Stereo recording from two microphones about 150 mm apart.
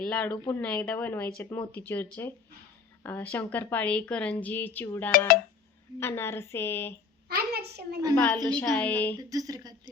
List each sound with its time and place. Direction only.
0.0 s speech: 5° left (ahead or behind)
5.1 s speech: 75° left (ahead or behind)
6.0 s speech: 15° left (ahead or behind)
7.3 s a sound: 90° right
8.4 s speech: 10° left (ahead or behind)
9.1 s speech: 25° right (ahead or behind)